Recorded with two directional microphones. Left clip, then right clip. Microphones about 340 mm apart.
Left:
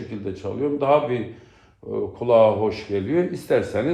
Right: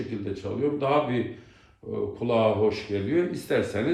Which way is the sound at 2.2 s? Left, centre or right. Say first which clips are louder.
Left 7 dB; left.